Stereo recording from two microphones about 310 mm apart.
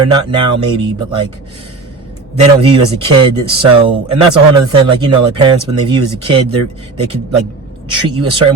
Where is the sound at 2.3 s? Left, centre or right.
Centre.